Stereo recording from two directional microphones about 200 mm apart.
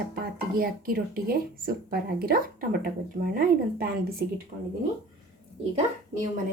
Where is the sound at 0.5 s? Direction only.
45° right (ahead or behind).